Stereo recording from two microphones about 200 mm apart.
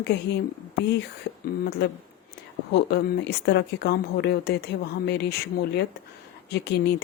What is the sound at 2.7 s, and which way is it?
Speech, 55° left (ahead or behind).